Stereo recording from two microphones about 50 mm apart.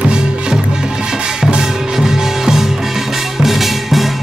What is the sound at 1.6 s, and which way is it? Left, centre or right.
Music, centre.